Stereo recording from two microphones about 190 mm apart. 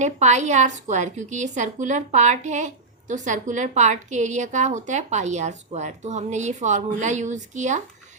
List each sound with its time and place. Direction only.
0.0 s a woman's voice: 40° right (ahead or behind)